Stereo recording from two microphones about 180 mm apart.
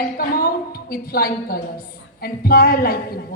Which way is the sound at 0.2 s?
55° left (ahead or behind).